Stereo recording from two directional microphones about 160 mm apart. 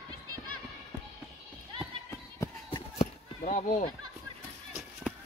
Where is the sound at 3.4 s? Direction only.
50° left (ahead or behind).